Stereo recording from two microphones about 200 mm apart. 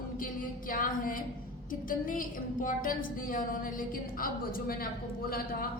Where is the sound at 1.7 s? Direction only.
45° left (ahead or behind).